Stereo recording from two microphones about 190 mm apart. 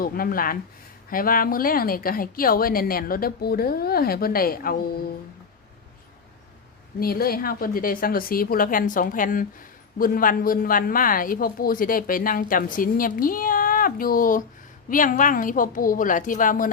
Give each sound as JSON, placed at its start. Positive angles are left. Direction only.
{"t": 0.0, "sound": "a woman's voice", "side_deg": 50}
{"t": 7.0, "sound": "a woman's voice", "side_deg": 50}